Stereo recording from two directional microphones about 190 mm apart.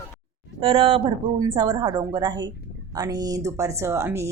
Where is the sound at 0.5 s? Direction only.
30° right (ahead or behind).